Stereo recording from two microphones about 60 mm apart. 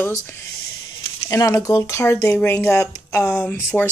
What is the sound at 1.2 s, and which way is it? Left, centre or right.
Speech, left.